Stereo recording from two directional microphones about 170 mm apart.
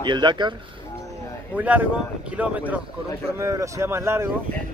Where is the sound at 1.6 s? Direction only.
10° right (ahead or behind).